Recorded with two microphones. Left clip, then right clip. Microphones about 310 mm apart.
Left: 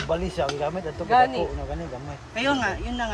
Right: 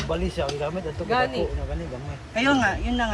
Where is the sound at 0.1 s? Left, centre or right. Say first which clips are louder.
Left 2 dB; left.